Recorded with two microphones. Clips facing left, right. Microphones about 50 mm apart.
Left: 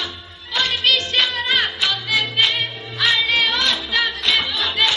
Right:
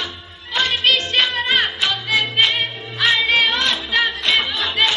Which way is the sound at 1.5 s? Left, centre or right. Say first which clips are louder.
Right 1 dB; centre.